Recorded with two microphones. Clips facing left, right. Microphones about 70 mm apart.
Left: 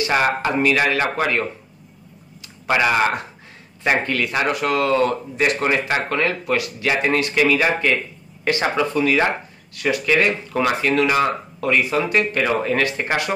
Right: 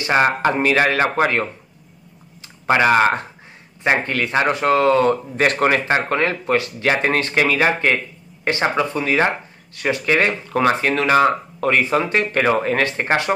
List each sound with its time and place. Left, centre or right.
0.0 s speech: right
2.6 s speech: right
5.4 s speech: right
5.9 s speech: right
8.5 s speech: right